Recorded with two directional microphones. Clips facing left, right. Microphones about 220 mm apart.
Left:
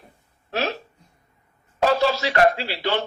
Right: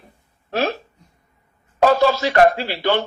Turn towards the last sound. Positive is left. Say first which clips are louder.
# right 4 dB
turn(degrees=-50)  # may be behind; listen again after turning